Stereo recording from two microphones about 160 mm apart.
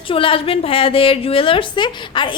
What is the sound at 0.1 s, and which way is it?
A woman's voice, 35° left (ahead or behind).